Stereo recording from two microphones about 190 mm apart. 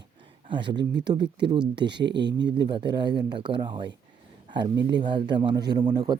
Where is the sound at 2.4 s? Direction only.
25° right (ahead or behind).